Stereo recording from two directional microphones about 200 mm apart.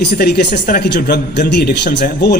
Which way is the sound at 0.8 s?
55° left (ahead or behind).